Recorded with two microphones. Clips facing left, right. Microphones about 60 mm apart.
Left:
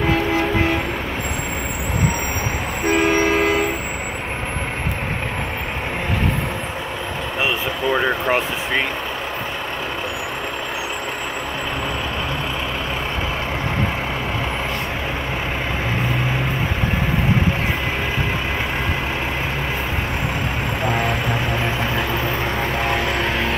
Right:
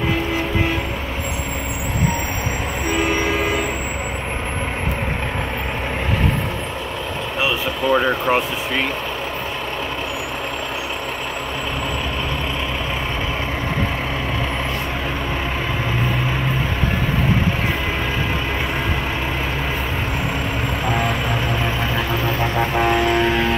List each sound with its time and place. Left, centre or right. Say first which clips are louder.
2.9 s vehicle: left 4 dB; left
7.9 s vehicle: right 2 dB; centre
20.8 s vehicle: left 1 dB; centre